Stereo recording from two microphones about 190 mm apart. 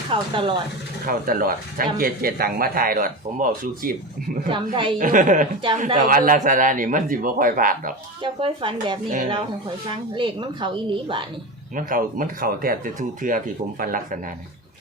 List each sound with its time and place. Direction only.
0.1 s speech: 25° right (ahead or behind)
1.0 s speech: 50° right (ahead or behind)
4.4 s a woman's voice: 25° right (ahead or behind)
4.9 s speech: 45° right (ahead or behind)
8.2 s a woman's voice: 25° right (ahead or behind)
9.0 s speech: 45° right (ahead or behind)
9.9 s a woman's voice: 25° right (ahead or behind)
11.8 s speech: 45° right (ahead or behind)